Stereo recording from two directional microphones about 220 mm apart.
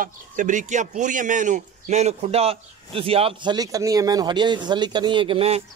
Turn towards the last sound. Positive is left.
turn(degrees=-25)  # may be behind; listen again after turning